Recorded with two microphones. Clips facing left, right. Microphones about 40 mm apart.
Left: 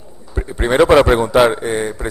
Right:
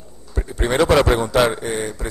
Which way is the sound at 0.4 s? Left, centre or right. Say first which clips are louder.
Left 5 dB; centre.